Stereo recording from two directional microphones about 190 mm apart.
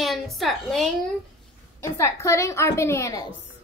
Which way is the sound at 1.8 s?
15° left (ahead or behind).